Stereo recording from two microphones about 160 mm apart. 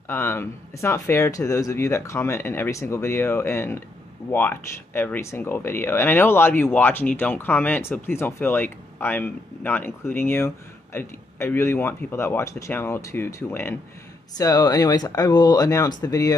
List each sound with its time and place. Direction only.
0.1 s speech: 15° left (ahead or behind)